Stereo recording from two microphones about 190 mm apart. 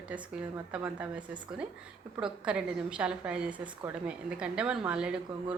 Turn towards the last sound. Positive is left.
turn(degrees=-5)  # may be behind; listen again after turning